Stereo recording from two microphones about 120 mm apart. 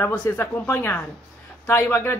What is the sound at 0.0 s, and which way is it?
A woman's voice, 20° left (ahead or behind).